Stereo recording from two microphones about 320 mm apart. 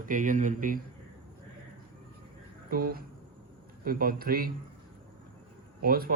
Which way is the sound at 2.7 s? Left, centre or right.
Right.